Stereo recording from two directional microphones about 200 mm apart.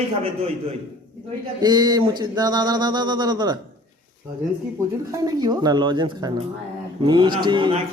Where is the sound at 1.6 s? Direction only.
20° right (ahead or behind).